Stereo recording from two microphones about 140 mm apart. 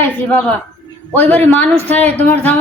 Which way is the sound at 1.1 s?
10° left (ahead or behind).